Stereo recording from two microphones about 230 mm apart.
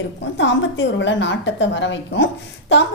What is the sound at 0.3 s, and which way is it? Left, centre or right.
A woman's voice, left.